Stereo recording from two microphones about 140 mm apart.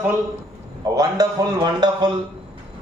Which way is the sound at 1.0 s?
25° right (ahead or behind).